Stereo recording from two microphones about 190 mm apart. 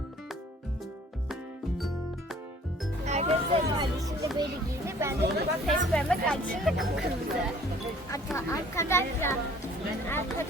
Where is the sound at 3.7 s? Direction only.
20° right (ahead or behind).